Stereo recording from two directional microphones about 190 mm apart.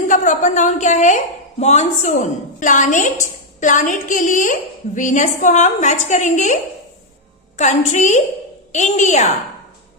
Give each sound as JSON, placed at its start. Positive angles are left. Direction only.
{"t": 0.1, "sound": "a woman's voice", "side_deg": 40}